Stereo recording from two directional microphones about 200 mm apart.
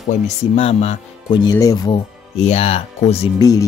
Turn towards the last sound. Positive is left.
turn(degrees=20)  # may be behind; listen again after turning